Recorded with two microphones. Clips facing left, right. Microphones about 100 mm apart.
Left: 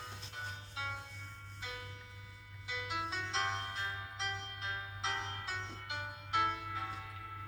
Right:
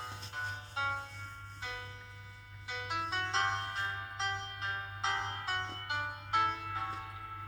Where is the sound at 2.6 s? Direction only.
45° right (ahead or behind).